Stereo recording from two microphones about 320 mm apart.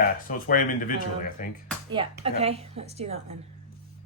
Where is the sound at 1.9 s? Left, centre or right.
Centre.